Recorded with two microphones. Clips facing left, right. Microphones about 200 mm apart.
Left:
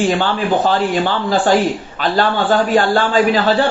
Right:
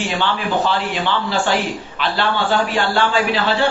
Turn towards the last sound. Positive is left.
turn(degrees=45)  # may be behind; listen again after turning